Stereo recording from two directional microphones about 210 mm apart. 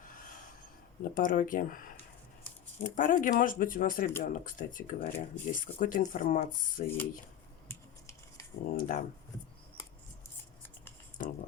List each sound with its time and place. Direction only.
0.0 s a sound: 40° left (ahead or behind)
1.1 s speech: 40° left (ahead or behind)
6.8 s speech: 10° left (ahead or behind)
7.7 s scissors: 15° left (ahead or behind)
8.7 s speech: 40° left (ahead or behind)